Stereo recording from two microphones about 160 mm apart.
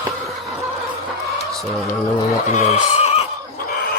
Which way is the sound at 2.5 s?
50° left (ahead or behind).